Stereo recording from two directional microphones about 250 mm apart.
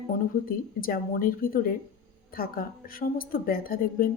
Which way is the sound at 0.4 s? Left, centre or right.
Left.